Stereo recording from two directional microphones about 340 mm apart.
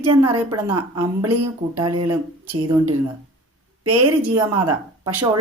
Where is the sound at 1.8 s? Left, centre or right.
Centre.